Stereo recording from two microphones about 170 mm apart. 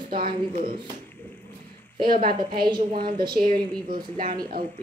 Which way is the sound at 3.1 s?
25° right (ahead or behind).